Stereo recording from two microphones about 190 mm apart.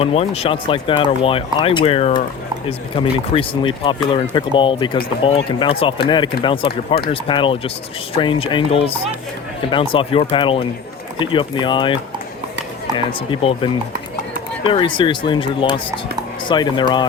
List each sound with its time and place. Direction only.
0.0 s speech: 30° left (ahead or behind)
13.0 s speech: 25° left (ahead or behind)